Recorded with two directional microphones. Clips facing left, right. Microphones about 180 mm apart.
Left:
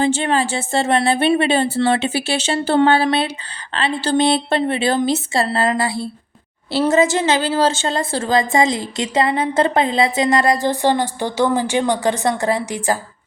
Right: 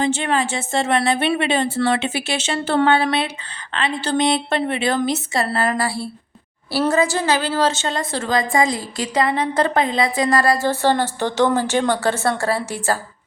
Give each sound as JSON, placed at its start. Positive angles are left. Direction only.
{"t": 0.0, "sound": "a woman's voice", "side_deg": 30}